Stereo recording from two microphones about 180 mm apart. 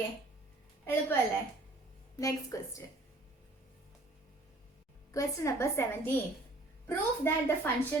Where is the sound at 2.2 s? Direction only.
20° left (ahead or behind).